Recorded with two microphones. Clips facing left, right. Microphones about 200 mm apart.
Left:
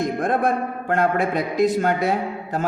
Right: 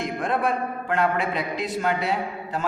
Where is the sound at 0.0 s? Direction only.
45° left (ahead or behind).